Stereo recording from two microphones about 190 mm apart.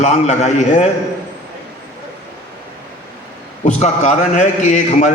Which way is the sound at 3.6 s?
40° left (ahead or behind).